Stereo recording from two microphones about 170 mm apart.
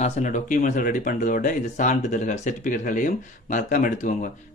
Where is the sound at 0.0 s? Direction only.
45° left (ahead or behind).